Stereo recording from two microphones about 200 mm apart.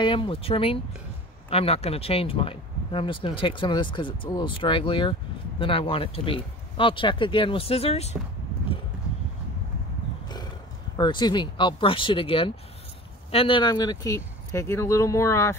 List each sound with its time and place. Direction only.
0.0 s speech: 25° left (ahead or behind)
10.2 s a sound: 20° left (ahead or behind)
11.0 s speech: 20° left (ahead or behind)